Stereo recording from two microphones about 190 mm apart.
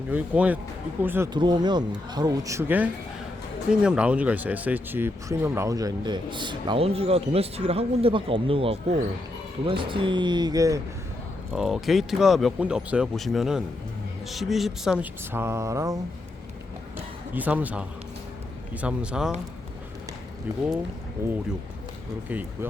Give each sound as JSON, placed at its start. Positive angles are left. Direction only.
{"t": 0.1, "sound": "speech", "side_deg": -10}
{"t": 1.3, "sound": "speech", "side_deg": -20}
{"t": 11.5, "sound": "speech", "side_deg": 0}
{"t": 17.3, "sound": "speech", "side_deg": -10}
{"t": 21.2, "sound": "speech", "side_deg": -15}